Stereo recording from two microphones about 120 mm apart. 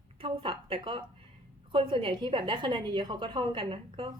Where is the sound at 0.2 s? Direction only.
50° right (ahead or behind).